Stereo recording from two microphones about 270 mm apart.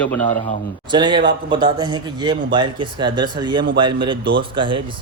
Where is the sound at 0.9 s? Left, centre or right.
Centre.